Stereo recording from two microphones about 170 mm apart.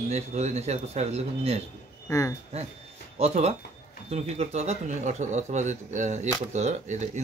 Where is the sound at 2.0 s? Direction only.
15° left (ahead or behind).